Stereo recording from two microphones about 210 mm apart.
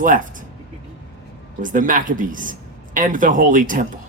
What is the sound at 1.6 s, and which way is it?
Speech, 40° right (ahead or behind).